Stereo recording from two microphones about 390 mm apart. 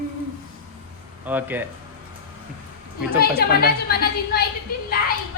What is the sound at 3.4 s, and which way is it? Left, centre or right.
A woman's voice, left.